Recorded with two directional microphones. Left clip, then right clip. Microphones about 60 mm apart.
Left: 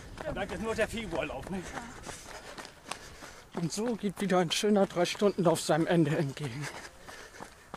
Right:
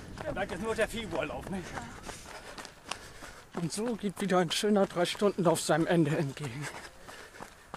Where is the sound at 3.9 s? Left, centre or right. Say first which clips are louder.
Even; centre.